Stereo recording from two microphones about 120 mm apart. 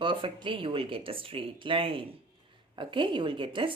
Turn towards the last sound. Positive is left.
turn(degrees=-45)  # may be behind; listen again after turning